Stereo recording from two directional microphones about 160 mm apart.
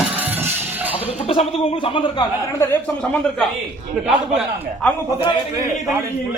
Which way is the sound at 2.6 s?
10° left (ahead or behind).